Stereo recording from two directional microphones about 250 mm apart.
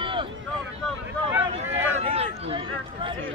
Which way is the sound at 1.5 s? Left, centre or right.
Right.